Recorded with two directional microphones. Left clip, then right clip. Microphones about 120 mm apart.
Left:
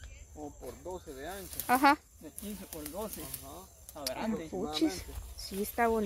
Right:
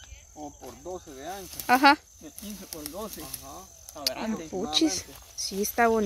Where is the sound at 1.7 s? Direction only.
45° right (ahead or behind).